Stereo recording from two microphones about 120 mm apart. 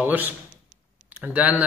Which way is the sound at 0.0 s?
15° right (ahead or behind).